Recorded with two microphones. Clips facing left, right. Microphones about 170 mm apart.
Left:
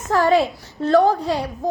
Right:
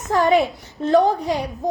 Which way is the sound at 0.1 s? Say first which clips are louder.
Even; 20° right (ahead or behind).